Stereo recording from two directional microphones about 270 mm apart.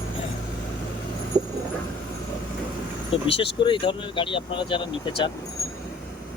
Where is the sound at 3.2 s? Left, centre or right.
Centre.